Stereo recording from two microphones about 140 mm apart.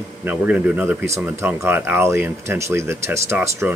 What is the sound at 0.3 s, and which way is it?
Speech, 10° right (ahead or behind).